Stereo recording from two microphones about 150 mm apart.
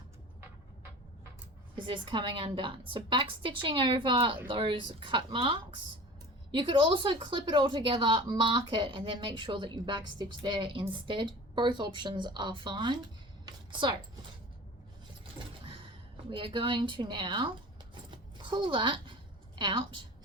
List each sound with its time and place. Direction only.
1.7 s a woman's voice: 35° right (ahead or behind)
16.3 s a woman's voice: 35° right (ahead or behind)
18.1 s a sound: 30° right (ahead or behind)
19.5 s a woman's voice: 30° right (ahead or behind)